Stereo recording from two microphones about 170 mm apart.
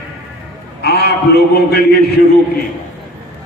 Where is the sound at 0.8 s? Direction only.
70° left (ahead or behind).